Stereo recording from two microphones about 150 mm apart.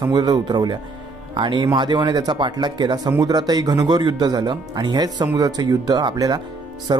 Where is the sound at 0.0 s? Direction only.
25° right (ahead or behind).